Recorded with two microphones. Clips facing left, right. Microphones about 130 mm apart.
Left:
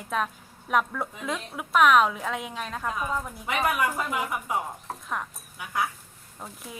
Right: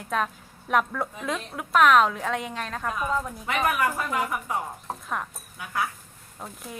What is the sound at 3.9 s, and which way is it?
Speech, 15° left (ahead or behind).